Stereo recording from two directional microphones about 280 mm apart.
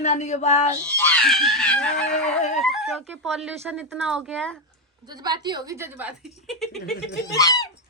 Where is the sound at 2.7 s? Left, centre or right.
Centre.